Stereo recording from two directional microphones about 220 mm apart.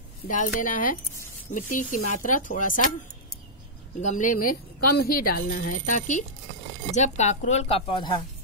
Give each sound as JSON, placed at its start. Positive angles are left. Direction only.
{"t": 0.3, "sound": "speech", "side_deg": 35}
{"t": 4.0, "sound": "speech", "side_deg": 35}